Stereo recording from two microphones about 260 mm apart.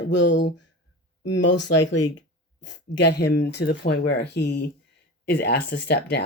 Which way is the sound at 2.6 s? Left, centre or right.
Left.